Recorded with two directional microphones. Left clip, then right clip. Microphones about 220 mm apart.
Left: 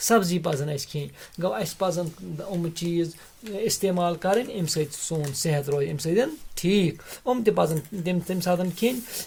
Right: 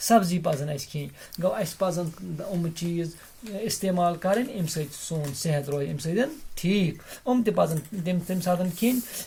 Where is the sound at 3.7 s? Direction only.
45° left (ahead or behind).